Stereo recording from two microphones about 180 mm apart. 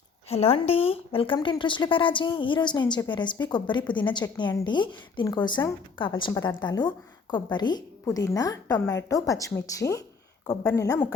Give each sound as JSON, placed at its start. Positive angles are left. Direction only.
{"t": 0.3, "sound": "a woman's voice", "side_deg": 35}